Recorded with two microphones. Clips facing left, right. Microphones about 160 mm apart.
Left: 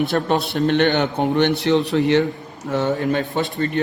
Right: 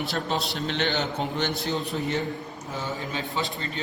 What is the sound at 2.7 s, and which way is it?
A man's voice, 70° left (ahead or behind).